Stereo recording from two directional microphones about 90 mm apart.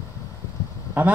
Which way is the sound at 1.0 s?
20° right (ahead or behind).